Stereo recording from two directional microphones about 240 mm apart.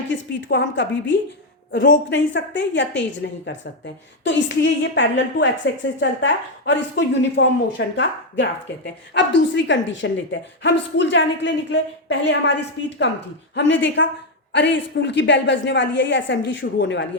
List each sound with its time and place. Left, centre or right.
0.1 s a woman's voice: left
13.6 s a woman's voice: left